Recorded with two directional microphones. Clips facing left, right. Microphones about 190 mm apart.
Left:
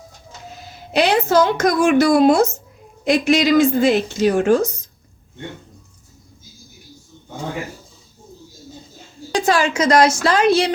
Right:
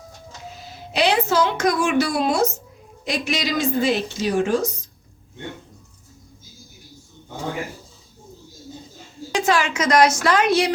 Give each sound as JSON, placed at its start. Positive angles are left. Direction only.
{"t": 0.9, "sound": "a woman's voice", "side_deg": 45}
{"t": 9.3, "sound": "a woman's voice", "side_deg": 35}